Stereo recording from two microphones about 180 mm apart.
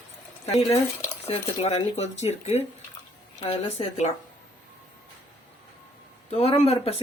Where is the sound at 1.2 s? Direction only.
35° left (ahead or behind).